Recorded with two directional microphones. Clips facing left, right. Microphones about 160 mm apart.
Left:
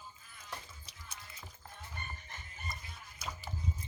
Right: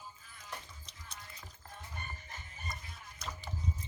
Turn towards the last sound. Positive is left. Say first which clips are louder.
# even
turn(degrees=5)  # may be behind; listen again after turning